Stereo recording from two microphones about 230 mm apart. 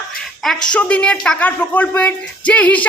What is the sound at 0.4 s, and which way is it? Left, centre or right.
A woman's voice, centre.